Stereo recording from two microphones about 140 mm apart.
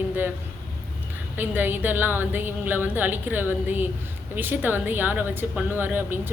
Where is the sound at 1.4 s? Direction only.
15° right (ahead or behind).